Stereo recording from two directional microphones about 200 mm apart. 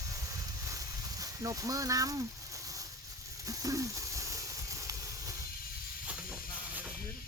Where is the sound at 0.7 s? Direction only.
15° right (ahead or behind).